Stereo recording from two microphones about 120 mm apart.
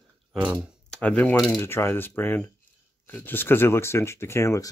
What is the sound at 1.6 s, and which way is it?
Speech, 20° left (ahead or behind).